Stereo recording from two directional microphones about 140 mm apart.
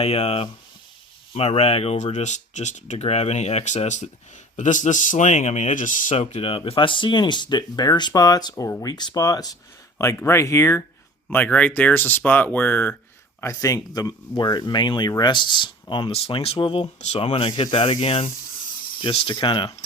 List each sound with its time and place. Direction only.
0.0 s speech: 50° left (ahead or behind); by 6.1 s 65° left (ahead or behind)
6.1 s speech: 45° left (ahead or behind)
17.0 s speech: 50° left (ahead or behind)
17.2 s speech: 40° left (ahead or behind)